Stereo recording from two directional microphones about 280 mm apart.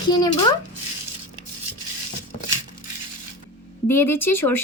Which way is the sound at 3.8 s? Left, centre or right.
Centre.